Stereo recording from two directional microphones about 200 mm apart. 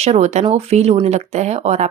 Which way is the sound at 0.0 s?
35° right (ahead or behind).